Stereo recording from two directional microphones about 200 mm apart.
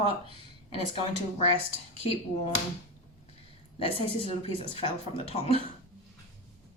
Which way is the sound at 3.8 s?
30° left (ahead or behind).